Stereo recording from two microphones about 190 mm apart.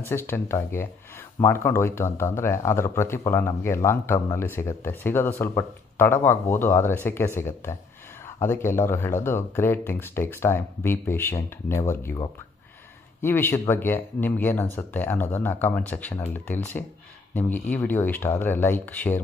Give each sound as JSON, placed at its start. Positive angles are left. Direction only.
{"t": 0.0, "sound": "speech", "side_deg": 10}